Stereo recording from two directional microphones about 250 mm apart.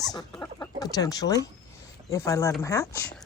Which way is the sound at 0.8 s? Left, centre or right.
Centre.